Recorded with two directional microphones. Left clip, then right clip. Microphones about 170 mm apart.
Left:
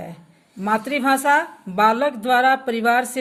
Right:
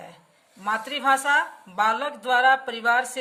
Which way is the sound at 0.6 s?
40° left (ahead or behind).